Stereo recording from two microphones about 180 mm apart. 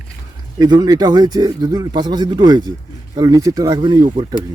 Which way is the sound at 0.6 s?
25° right (ahead or behind).